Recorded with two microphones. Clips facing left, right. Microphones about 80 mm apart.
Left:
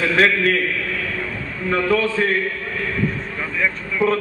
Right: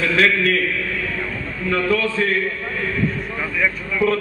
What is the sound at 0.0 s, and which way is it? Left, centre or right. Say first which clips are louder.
Speech: left 1 dB; left.